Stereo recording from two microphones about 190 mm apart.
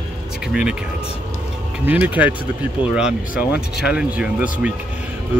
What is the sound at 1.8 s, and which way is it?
Speech, 10° right (ahead or behind).